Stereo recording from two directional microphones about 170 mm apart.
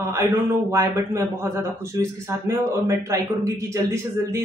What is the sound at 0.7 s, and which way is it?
Speech, 15° right (ahead or behind).